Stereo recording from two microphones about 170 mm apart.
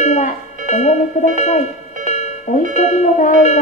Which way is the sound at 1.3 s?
40° left (ahead or behind).